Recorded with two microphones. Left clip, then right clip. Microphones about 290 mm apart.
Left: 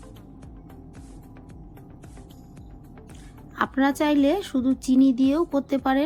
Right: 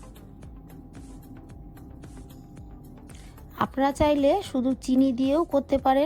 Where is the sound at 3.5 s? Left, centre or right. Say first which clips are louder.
Left 1 dB; right.